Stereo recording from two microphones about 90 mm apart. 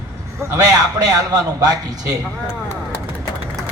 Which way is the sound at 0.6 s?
45° right (ahead or behind).